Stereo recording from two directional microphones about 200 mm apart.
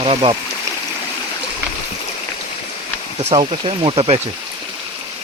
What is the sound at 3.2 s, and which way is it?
Speech, 25° right (ahead or behind).